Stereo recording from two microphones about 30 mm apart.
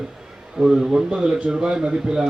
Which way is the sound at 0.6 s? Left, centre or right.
Centre.